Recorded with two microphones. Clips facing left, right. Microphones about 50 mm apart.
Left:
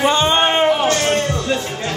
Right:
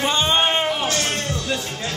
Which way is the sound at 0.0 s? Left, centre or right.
Centre.